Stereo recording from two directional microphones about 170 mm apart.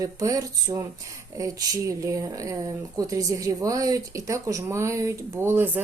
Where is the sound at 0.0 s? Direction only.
20° right (ahead or behind).